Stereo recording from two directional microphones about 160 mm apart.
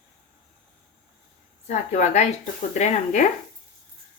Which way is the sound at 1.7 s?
45° left (ahead or behind).